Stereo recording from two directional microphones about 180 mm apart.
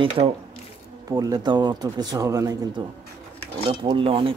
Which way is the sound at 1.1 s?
20° right (ahead or behind).